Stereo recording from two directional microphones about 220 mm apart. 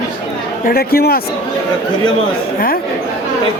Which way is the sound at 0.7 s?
45° left (ahead or behind).